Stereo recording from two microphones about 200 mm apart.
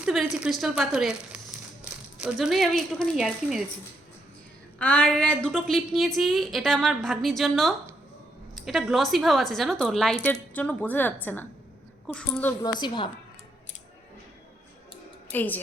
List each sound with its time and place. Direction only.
0.0 s a woman's voice: centre (ahead or behind)
4.8 s a woman's voice: 5° left (ahead or behind)
12.8 s a woman's voice: 25° left (ahead or behind)
15.3 s a woman's voice: 10° left (ahead or behind)